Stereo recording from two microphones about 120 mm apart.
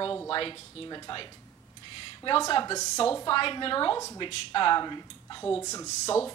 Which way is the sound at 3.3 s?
45° left (ahead or behind).